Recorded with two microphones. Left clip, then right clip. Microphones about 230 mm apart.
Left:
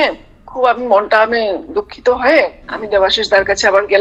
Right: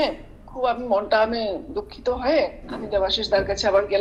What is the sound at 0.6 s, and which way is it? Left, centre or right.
A woman's voice, left.